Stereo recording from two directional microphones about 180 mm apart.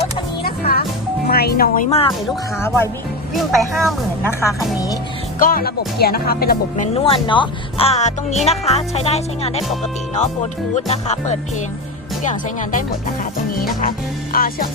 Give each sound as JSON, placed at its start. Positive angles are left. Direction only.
{"t": 0.4, "sound": "music", "side_deg": 55}
{"t": 1.3, "sound": "speech", "side_deg": 55}
{"t": 1.9, "sound": "speech", "side_deg": 35}
{"t": 2.6, "sound": "speech", "side_deg": 15}
{"t": 3.3, "sound": "speech", "side_deg": 0}
{"t": 4.3, "sound": "speech", "side_deg": 15}
{"t": 5.4, "sound": "speech", "side_deg": 50}
{"t": 6.9, "sound": "speech", "side_deg": 30}
{"t": 10.8, "sound": "speech", "side_deg": 35}